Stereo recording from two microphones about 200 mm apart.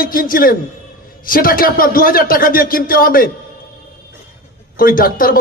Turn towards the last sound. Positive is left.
turn(degrees=45)  # may be behind; listen again after turning